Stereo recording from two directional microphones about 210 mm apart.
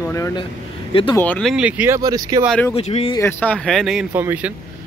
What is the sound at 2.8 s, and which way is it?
Speech, 30° left (ahead or behind).